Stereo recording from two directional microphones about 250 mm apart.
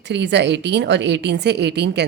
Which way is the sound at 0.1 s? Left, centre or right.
Right.